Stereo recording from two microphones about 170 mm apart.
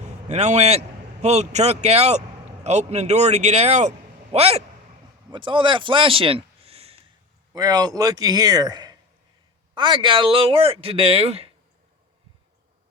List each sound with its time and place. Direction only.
0.0 s a man's voice: 40° right (ahead or behind)
7.5 s a man's voice: 20° right (ahead or behind)